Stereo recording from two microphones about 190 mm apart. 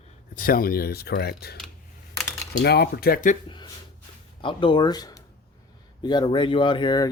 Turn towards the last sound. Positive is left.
turn(degrees=20)  # may be behind; listen again after turning